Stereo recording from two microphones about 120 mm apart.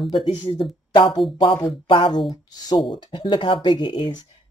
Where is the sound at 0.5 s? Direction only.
40° left (ahead or behind).